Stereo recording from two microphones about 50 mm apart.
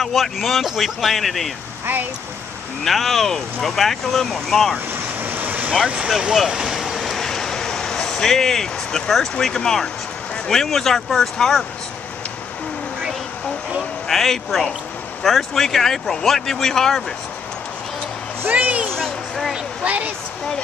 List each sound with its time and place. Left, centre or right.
0.0 s speech: centre
2.8 s speech: centre
5.2 s vehicle: right
6.0 s speech: centre
7.0 s a sound: centre
9.6 s speech: centre
14.0 s speech: centre
18.5 s speech: right